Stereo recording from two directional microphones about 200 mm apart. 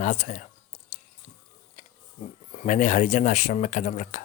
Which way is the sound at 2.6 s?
40° left (ahead or behind).